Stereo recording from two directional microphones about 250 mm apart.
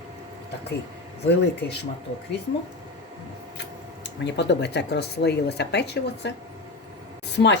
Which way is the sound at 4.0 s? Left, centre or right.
Left.